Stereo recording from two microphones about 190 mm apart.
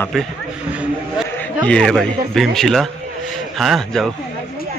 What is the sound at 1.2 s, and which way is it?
Speech, 5° left (ahead or behind).